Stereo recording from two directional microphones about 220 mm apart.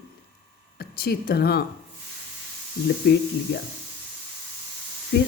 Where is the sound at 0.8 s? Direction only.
45° left (ahead or behind).